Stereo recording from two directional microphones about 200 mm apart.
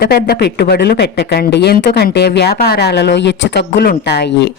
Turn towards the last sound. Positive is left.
turn(degrees=60)  # may be behind; listen again after turning